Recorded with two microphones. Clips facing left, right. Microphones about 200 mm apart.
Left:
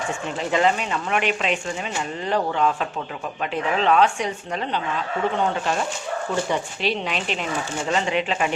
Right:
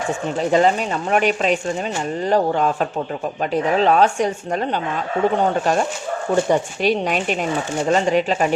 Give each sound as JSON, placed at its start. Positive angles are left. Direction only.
{"t": 0.3, "sound": "a woman's voice", "side_deg": -40}